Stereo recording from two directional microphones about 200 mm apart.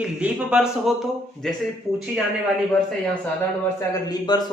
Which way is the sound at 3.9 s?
20° left (ahead or behind).